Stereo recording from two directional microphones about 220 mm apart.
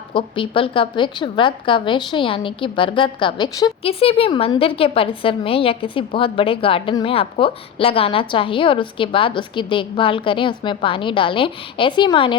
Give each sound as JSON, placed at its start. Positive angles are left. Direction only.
{"t": 0.1, "sound": "a woman's voice", "side_deg": 25}